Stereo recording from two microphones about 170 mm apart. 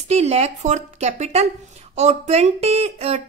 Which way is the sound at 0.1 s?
40° right (ahead or behind).